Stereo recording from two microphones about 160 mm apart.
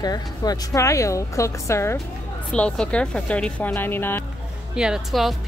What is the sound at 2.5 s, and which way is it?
Speech, 5° left (ahead or behind).